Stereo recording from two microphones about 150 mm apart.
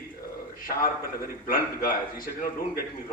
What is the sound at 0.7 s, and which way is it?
A man's voice, 60° left (ahead or behind).